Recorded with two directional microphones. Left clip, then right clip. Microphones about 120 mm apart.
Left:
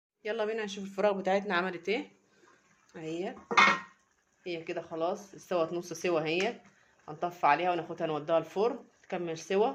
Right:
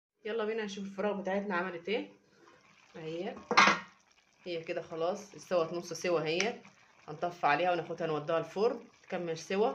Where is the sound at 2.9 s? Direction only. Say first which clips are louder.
Left 2 dB; 35° left (ahead or behind).